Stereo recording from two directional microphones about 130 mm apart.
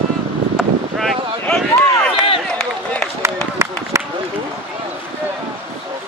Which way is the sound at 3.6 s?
20° right (ahead or behind).